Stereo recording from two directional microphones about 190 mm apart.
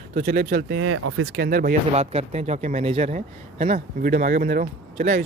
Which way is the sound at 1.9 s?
35° right (ahead or behind).